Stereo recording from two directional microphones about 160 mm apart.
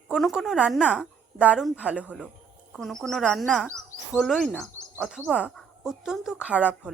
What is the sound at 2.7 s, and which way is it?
Speech, centre (ahead or behind).